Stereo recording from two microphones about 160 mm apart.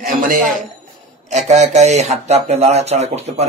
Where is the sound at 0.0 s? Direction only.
60° right (ahead or behind).